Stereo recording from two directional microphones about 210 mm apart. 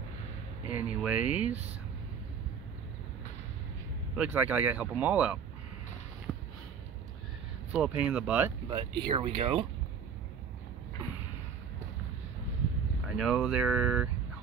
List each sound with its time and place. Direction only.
0.7 s speech: 5° right (ahead or behind)
4.1 s speech: 5° right (ahead or behind)
7.7 s speech: 5° right (ahead or behind)
8.6 s speech: 20° right (ahead or behind)
13.0 s speech: centre (ahead or behind)